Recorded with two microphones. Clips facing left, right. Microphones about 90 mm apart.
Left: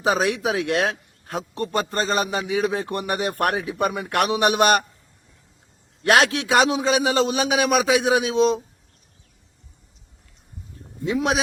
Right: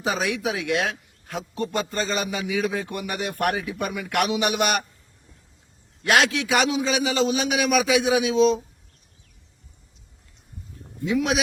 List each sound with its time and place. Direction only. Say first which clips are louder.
0.0 s a man's voice: left 4 dB; 40° left (ahead or behind)
1.5 s a man's voice: left 2 dB; 50° left (ahead or behind)
6.1 s a man's voice: left 2 dB; 40° left (ahead or behind)